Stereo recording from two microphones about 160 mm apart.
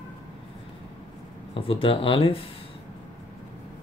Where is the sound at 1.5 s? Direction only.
35° left (ahead or behind).